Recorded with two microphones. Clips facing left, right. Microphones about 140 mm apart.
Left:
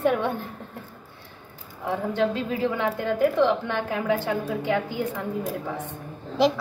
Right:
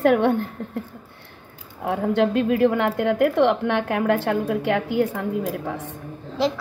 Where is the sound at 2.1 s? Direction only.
60° right (ahead or behind); by 5.1 s 75° right (ahead or behind).